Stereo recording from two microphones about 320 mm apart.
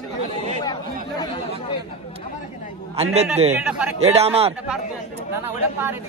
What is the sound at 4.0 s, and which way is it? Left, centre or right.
Speech, centre.